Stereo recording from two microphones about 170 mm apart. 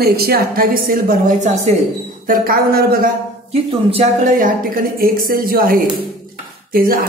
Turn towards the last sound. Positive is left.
turn(degrees=-60)  # may be behind; listen again after turning